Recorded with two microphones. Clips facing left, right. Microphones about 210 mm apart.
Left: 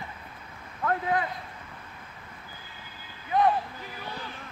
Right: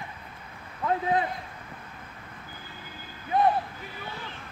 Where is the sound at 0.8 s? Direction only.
20° right (ahead or behind).